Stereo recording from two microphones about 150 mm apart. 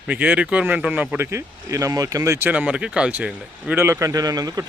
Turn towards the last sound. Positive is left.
turn(degrees=-25)  # may be behind; listen again after turning